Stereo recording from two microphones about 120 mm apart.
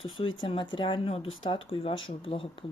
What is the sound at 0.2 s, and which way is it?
Speech, 50° left (ahead or behind).